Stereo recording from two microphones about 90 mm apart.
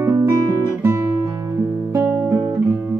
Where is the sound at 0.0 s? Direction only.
30° right (ahead or behind).